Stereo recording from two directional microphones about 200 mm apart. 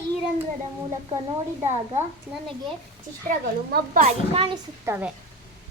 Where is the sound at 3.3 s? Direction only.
45° right (ahead or behind).